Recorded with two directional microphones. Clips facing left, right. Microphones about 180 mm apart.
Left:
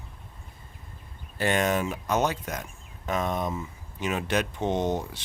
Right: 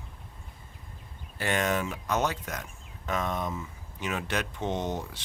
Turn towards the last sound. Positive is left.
turn(degrees=20)  # may be behind; listen again after turning